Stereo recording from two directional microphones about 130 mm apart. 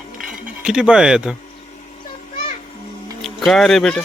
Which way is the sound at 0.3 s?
5° right (ahead or behind).